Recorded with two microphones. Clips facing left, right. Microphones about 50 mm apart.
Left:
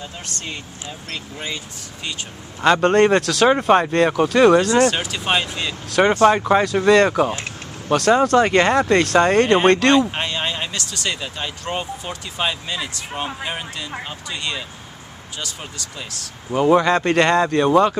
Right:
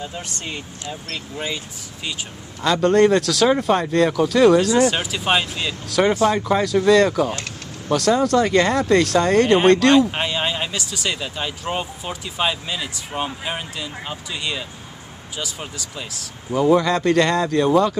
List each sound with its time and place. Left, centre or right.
0.0 s speech: centre
2.6 s speech: left
4.7 s speech: centre
6.0 s speech: left
9.9 s speech: centre
16.5 s speech: left